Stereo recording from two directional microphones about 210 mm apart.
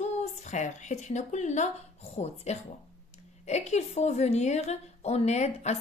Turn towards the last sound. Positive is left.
turn(degrees=30)  # may be behind; listen again after turning